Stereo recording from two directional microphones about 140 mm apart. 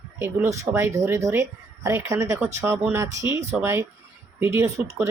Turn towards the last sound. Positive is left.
turn(degrees=-20)  # may be behind; listen again after turning